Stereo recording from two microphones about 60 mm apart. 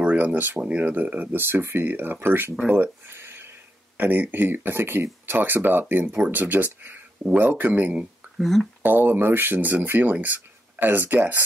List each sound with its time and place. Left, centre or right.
0.0 s speech: right
2.6 s speech: right
3.1 s a sound: right
3.9 s speech: right
6.0 s speech: right
6.3 s speech: right
8.4 s speech: centre
8.8 s speech: right